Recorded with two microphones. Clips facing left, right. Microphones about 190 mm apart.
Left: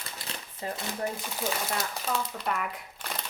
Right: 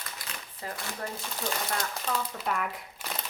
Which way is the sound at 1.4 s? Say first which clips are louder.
Left 1 dB; 5° left (ahead or behind).